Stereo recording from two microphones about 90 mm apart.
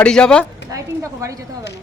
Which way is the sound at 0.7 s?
40° right (ahead or behind).